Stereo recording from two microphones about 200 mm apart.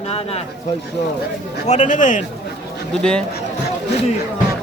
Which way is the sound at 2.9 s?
5° left (ahead or behind).